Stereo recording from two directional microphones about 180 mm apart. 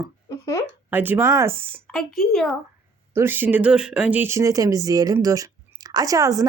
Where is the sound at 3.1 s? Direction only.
10° right (ahead or behind).